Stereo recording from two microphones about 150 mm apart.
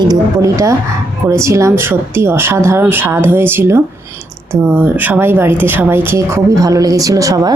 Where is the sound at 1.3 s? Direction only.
20° right (ahead or behind).